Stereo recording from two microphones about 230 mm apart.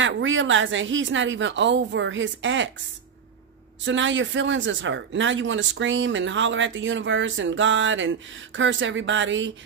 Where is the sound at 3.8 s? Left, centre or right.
Right.